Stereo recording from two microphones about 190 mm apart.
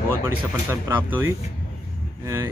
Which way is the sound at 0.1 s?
10° right (ahead or behind).